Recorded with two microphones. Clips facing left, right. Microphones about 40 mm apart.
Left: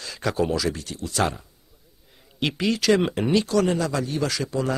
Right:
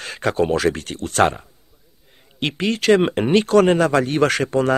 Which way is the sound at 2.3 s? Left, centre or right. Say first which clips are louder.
Right 2 dB; right.